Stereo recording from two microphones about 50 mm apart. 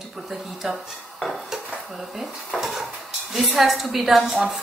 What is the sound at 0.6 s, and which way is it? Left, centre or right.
Speech, centre.